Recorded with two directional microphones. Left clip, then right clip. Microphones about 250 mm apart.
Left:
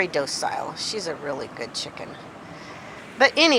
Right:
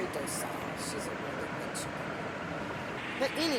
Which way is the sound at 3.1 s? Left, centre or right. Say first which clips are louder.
Left 15 dB; right.